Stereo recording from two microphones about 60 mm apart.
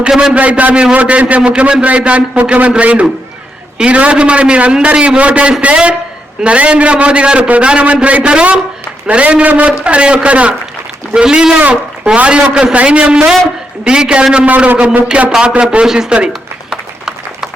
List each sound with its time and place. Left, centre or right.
0.1 s a man's voice: centre
0.3 s a man's voice: right
15.0 s a sound: centre